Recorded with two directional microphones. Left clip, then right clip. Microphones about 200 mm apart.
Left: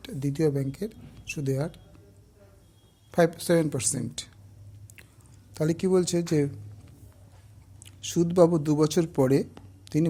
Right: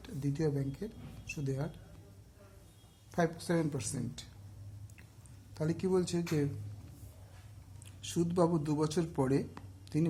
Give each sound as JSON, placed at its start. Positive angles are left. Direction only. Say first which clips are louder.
{"t": 0.0, "sound": "speech", "louder": "left 9 dB", "side_deg": 40}
{"t": 3.1, "sound": "speech", "louder": "left 11 dB", "side_deg": 40}
{"t": 5.5, "sound": "speech", "louder": "left 8 dB", "side_deg": 40}
{"t": 7.9, "sound": "speech", "louder": "left 9 dB", "side_deg": 30}
{"t": 9.8, "sound": "a sound", "louder": "left 8 dB", "side_deg": 35}